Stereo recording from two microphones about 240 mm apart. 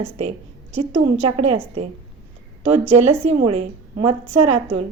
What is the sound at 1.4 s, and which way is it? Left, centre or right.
Speech, right.